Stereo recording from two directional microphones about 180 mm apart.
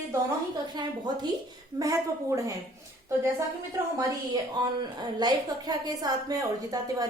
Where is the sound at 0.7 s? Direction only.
25° right (ahead or behind).